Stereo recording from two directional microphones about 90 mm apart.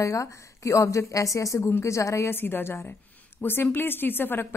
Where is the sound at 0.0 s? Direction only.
35° left (ahead or behind).